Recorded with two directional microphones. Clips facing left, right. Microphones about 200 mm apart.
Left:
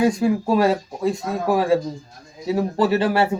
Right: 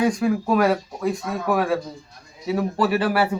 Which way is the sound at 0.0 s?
25° left (ahead or behind).